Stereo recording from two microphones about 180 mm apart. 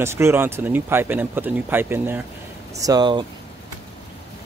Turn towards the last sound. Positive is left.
turn(degrees=-25)  # may be behind; listen again after turning